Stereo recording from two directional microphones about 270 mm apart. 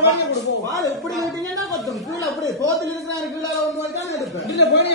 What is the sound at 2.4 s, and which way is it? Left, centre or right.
A man's voice, centre.